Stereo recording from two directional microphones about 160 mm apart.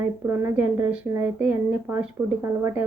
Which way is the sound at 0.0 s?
15° right (ahead or behind).